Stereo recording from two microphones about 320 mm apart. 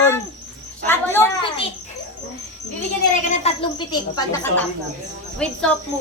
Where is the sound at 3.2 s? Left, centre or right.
Left.